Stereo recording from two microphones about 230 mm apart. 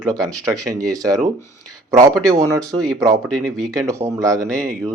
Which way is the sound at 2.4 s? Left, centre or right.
Centre.